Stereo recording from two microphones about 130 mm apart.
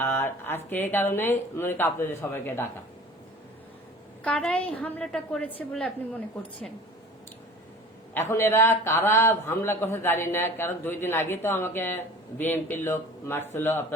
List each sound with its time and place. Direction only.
0.0 s a man's voice: 15° left (ahead or behind)
4.2 s a man's voice: 10° left (ahead or behind)
8.1 s a man's voice: 20° left (ahead or behind)